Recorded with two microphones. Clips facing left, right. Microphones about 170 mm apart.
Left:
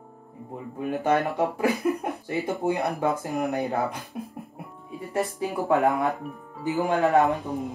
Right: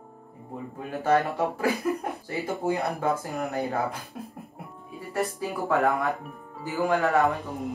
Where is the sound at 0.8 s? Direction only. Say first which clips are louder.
Even; 20° left (ahead or behind).